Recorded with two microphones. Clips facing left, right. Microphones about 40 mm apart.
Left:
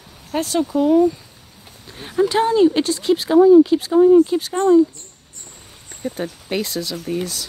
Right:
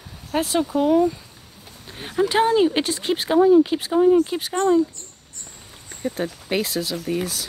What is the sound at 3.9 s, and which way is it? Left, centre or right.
Speech, centre.